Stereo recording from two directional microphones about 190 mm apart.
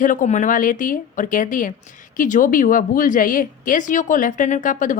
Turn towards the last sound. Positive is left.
turn(degrees=45)  # may be behind; listen again after turning